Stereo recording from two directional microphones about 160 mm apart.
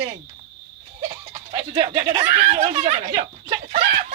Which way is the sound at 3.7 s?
50° right (ahead or behind).